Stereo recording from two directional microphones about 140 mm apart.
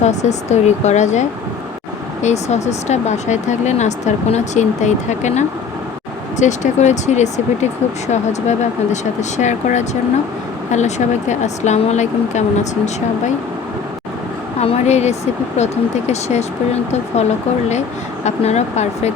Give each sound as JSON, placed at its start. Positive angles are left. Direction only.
{"t": 0.0, "sound": "speech", "side_deg": 55}
{"t": 14.6, "sound": "speech", "side_deg": 50}
{"t": 18.3, "sound": "speech", "side_deg": 55}